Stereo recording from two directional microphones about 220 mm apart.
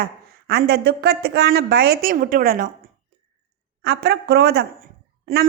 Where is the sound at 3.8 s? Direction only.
45° right (ahead or behind).